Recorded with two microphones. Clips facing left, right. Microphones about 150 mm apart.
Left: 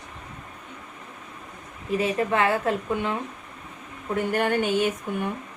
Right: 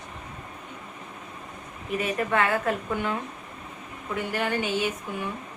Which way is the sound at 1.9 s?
25° left (ahead or behind).